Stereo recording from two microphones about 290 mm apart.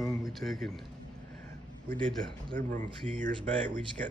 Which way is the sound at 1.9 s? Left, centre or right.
Centre.